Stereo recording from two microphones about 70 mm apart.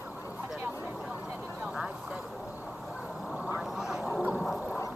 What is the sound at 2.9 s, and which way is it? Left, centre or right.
Duck, centre.